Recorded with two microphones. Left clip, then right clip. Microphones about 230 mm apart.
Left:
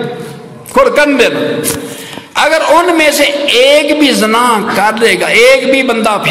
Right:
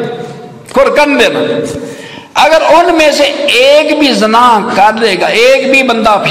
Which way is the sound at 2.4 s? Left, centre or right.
Left.